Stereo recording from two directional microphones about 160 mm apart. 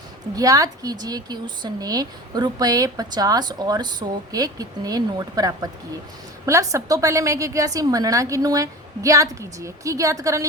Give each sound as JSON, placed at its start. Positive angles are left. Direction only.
{"t": 0.3, "sound": "speech", "side_deg": -20}